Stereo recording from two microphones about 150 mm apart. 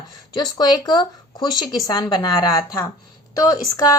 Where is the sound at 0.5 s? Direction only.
25° left (ahead or behind).